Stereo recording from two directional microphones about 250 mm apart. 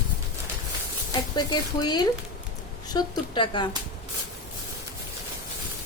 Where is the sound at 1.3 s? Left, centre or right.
Centre.